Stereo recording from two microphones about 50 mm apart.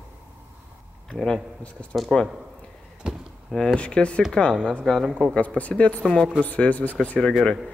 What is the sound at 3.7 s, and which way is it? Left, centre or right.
A woman's voice, left.